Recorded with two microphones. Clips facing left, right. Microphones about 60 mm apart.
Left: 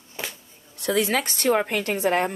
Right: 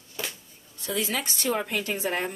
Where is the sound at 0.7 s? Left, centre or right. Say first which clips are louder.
Left 7 dB; left.